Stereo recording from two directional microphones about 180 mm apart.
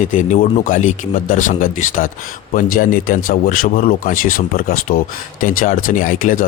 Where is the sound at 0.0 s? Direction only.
45° left (ahead or behind).